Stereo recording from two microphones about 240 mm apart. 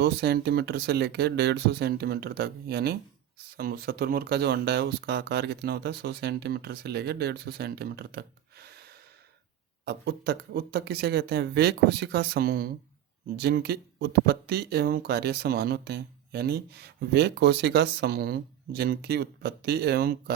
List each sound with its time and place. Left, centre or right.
0.0 s speech: right
9.8 s speech: right